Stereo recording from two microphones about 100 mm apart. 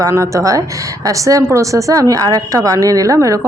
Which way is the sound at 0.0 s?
30° right (ahead or behind).